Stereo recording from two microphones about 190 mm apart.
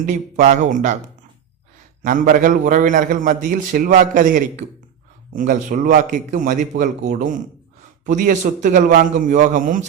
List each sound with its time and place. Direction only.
0.0 s speech: 40° right (ahead or behind)
2.0 s a man's voice: 45° right (ahead or behind)